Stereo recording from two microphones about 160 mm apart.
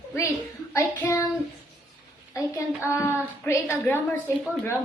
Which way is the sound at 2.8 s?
15° left (ahead or behind).